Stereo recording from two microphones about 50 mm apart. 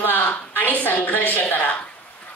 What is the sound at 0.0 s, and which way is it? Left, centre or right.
A woman's voice, left.